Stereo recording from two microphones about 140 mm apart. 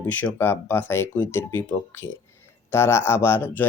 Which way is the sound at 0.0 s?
10° left (ahead or behind).